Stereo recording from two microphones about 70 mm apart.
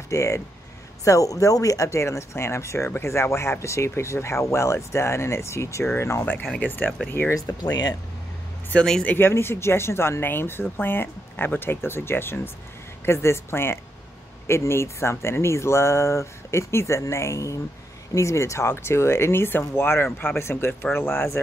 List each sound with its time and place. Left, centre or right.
0.1 s speech: left
6.6 s speech: left
7.6 s speech: left
8.7 s speech: centre
9.0 s speech: left